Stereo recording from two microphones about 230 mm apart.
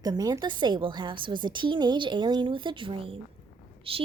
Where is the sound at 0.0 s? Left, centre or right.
Centre.